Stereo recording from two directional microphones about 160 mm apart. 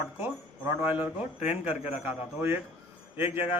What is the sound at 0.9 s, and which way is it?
A man's voice, 10° right (ahead or behind).